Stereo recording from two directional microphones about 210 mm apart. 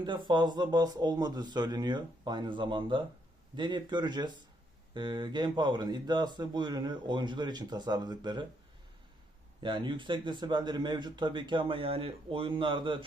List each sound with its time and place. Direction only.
0.0 s speech: 20° right (ahead or behind)
9.6 s speech: 25° right (ahead or behind)